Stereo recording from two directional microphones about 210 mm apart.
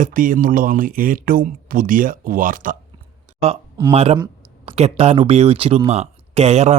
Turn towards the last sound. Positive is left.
turn(degrees=-30)  # may be behind; listen again after turning